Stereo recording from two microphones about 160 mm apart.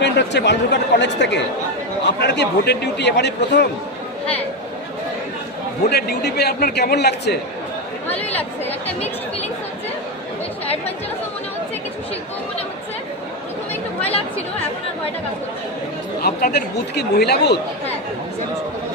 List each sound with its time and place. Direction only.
0.0 s speech: 90° left
5.9 s speech: 90° left
8.3 s speech: 10° left (ahead or behind)
14.0 s chatter: 40° left (ahead or behind)
16.2 s speech: 80° left